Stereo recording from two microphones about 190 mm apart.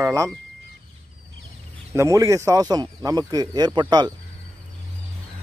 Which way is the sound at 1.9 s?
15° right (ahead or behind).